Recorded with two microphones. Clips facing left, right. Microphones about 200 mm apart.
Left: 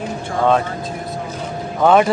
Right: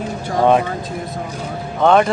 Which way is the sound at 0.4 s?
15° right (ahead or behind).